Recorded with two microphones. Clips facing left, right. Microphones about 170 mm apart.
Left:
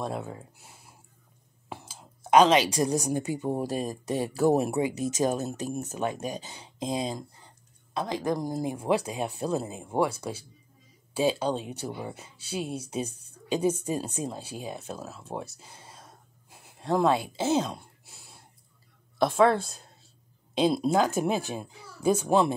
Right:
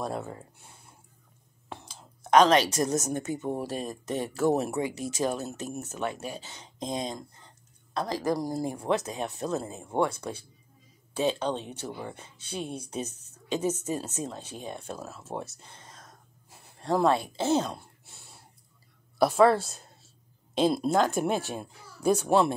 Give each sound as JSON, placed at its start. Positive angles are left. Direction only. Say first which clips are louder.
{"t": 0.0, "sound": "speech", "louder": "even", "side_deg": 0}
{"t": 1.7, "sound": "a sound", "louder": "left 1 dB", "side_deg": 5}
{"t": 3.1, "sound": "speech", "louder": "left 2 dB", "side_deg": 15}
{"t": 11.1, "sound": "speech", "louder": "left 2 dB", "side_deg": 10}
{"t": 16.4, "sound": "a sound", "louder": "even", "side_deg": 0}
{"t": 19.1, "sound": "a woman's voice", "louder": "right 1 dB", "side_deg": -5}